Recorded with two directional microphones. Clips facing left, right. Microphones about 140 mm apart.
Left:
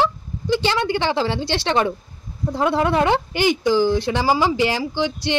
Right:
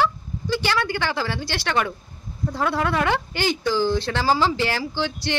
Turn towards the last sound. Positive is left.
turn(degrees=20)  # may be behind; listen again after turning